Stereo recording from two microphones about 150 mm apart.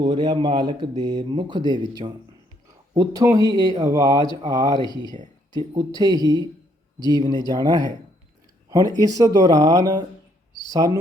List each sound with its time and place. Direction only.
0.0 s a man's voice: 30° right (ahead or behind)
4.8 s speech: 30° left (ahead or behind)
5.5 s a man's voice: 25° right (ahead or behind)
9.0 s a man's voice: 25° right (ahead or behind)